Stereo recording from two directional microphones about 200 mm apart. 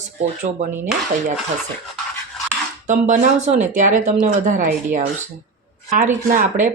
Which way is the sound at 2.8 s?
40° right (ahead or behind).